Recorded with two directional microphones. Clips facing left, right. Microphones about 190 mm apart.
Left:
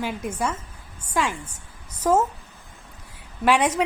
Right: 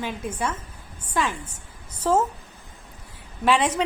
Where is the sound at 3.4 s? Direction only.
10° left (ahead or behind).